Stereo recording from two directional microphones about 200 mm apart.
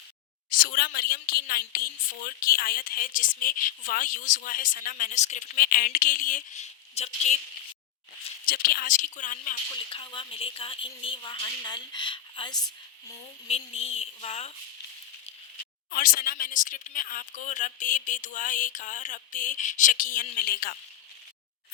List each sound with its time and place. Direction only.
0.6 s a woman's voice: 50° left (ahead or behind); by 7.3 s 35° left (ahead or behind)
8.4 s speech: 45° left (ahead or behind)
9.9 s a woman's voice: 25° left (ahead or behind)
15.9 s speech: 45° left (ahead or behind)